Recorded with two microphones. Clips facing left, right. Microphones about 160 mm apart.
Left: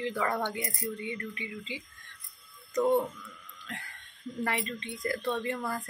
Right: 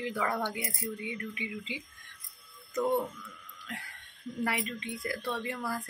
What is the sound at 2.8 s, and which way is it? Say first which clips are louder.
Speech: left 3 dB; 15° left (ahead or behind).